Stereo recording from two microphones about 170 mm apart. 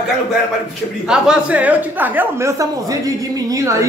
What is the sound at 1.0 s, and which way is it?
A woman's voice, 5° right (ahead or behind).